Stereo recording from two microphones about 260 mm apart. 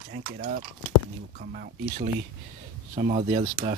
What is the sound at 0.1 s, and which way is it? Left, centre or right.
Speech, right.